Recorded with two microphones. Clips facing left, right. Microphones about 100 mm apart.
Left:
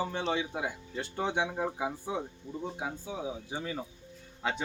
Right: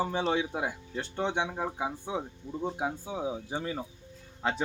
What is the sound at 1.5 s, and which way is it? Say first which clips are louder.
Speech: even; 5° right (ahead or behind).